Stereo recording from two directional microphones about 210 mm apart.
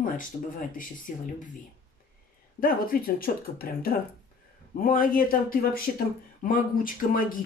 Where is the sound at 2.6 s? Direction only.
45° left (ahead or behind).